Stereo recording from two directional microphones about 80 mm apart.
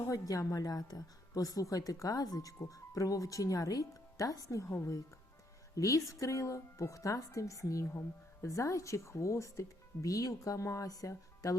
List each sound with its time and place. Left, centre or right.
0.1 s a woman's voice: left